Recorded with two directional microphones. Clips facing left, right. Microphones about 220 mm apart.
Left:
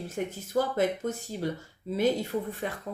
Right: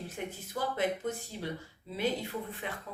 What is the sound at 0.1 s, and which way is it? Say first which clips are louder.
Speech: left 8 dB; 45° left (ahead or behind).